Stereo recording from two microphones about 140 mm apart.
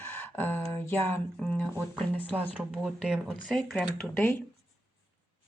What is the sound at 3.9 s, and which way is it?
Speech, 15° left (ahead or behind).